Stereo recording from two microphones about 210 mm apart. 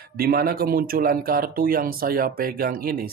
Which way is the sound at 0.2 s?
45° right (ahead or behind).